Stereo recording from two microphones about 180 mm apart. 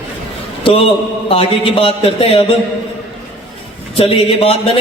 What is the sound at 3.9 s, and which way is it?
Speech, 30° left (ahead or behind).